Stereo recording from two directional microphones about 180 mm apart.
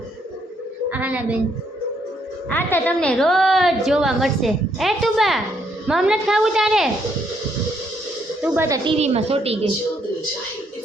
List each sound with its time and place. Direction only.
0.9 s a woman's voice: 10° right (ahead or behind)
2.5 s a woman's voice: 10° left (ahead or behind)
8.4 s speech: 15° right (ahead or behind)
8.8 s a woman's voice: 35° right (ahead or behind)